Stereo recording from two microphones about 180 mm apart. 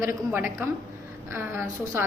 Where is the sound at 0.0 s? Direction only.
15° right (ahead or behind).